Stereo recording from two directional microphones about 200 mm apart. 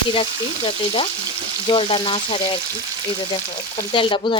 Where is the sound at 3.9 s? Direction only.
25° left (ahead or behind).